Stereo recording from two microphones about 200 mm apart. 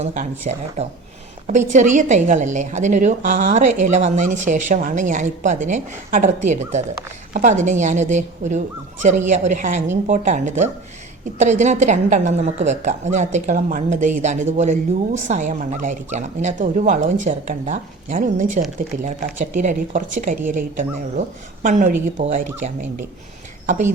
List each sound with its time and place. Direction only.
0.0 s a woman's voice: 35° right (ahead or behind)